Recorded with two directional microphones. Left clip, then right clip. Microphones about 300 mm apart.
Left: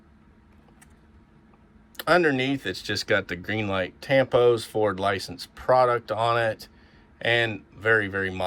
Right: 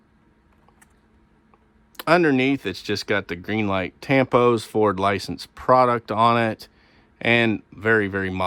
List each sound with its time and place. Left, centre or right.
2.0 s speech: right